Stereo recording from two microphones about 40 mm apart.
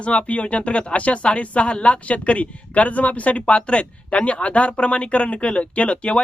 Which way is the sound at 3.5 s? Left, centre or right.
Left.